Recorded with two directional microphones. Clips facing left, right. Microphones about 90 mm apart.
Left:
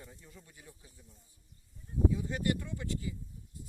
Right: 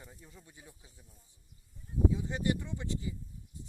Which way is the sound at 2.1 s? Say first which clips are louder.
Even; 20° right (ahead or behind).